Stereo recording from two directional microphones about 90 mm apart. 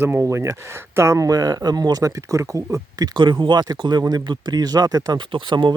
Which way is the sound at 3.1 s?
60° right (ahead or behind).